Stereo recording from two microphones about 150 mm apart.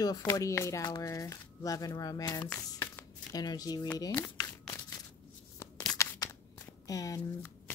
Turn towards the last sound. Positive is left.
turn(degrees=25)  # may be behind; listen again after turning